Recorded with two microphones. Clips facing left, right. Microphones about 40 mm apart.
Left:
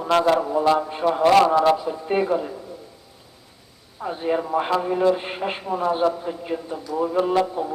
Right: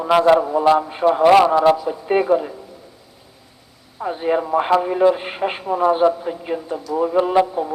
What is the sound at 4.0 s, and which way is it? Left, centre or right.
A man's voice, centre.